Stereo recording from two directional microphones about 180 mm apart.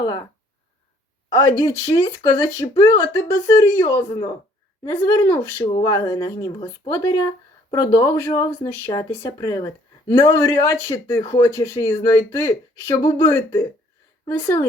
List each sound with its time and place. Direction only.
0.0 s speech: 20° left (ahead or behind)
1.3 s speech: 20° left (ahead or behind)